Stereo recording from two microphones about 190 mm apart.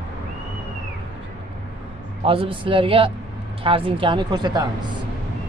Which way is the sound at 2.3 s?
30° right (ahead or behind).